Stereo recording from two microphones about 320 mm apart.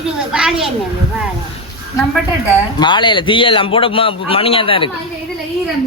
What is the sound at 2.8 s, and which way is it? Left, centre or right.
A man's voice, centre.